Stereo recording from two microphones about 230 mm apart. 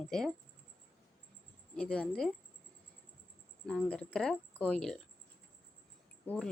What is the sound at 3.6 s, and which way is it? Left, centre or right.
Speech, centre.